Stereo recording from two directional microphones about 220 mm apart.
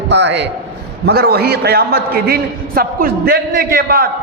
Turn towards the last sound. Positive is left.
turn(degrees=-45)  # may be behind; listen again after turning